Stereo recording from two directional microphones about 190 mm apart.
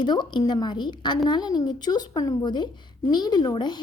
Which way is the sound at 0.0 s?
25° left (ahead or behind).